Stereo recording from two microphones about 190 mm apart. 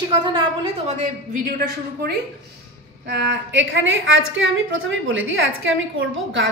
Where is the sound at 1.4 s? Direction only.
50° right (ahead or behind).